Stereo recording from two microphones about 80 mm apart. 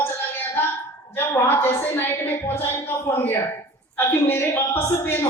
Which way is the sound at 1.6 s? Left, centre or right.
Left.